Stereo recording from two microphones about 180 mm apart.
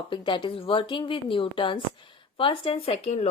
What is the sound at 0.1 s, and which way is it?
A woman's voice, 25° left (ahead or behind).